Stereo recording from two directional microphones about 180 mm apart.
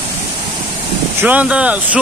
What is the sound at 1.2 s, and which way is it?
Speech, 10° right (ahead or behind).